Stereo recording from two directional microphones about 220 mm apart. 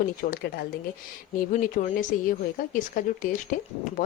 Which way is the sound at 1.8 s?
35° left (ahead or behind).